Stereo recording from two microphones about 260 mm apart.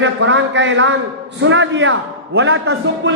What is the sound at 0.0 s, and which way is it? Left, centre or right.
A man's voice, right.